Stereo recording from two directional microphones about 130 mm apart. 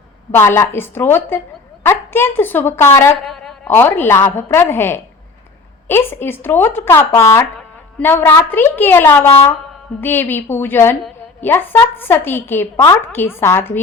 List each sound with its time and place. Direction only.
0.3 s a woman's voice: 20° left (ahead or behind)
3.2 s a sound: 5° left (ahead or behind)
3.7 s a woman's voice: 15° left (ahead or behind)